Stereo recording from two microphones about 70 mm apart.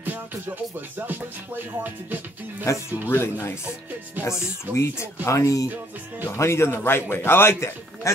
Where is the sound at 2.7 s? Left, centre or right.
Left.